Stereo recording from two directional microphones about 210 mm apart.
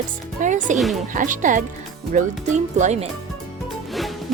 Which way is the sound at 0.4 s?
35° right (ahead or behind).